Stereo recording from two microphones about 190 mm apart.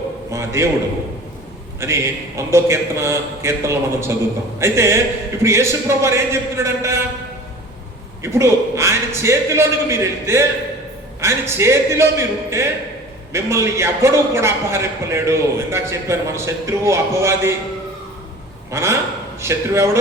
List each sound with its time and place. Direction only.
0.3 s a man's voice: 15° right (ahead or behind)
1.8 s a man's voice: 15° right (ahead or behind)
8.2 s a man's voice: 15° right (ahead or behind)
18.7 s a man's voice: 15° right (ahead or behind)